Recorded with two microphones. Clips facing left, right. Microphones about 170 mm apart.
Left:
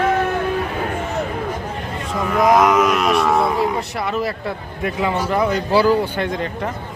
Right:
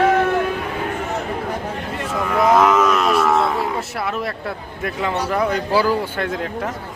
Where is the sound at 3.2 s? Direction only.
15° left (ahead or behind).